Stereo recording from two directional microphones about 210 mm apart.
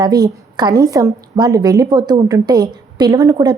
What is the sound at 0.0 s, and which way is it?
A woman's voice, 20° right (ahead or behind).